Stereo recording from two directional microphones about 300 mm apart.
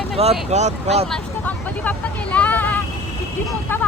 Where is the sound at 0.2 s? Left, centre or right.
Centre.